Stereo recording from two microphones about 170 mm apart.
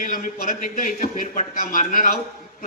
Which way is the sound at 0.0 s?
50° left (ahead or behind).